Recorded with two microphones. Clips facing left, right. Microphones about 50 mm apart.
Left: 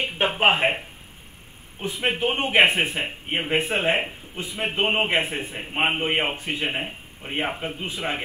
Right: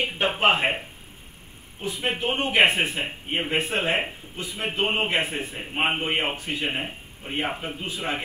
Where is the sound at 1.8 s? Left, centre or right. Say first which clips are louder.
Left 3 dB; left.